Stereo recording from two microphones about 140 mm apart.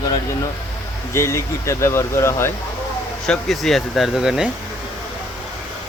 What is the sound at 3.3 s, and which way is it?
Speech, centre (ahead or behind).